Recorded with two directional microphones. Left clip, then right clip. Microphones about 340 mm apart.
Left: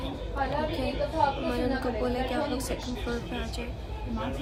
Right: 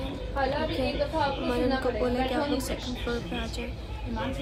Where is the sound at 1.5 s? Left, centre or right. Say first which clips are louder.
Right 3 dB; centre.